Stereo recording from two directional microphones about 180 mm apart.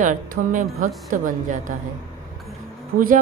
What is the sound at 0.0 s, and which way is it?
Speech, 45° right (ahead or behind).